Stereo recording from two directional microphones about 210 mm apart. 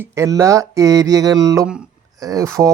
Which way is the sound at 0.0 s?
15° right (ahead or behind).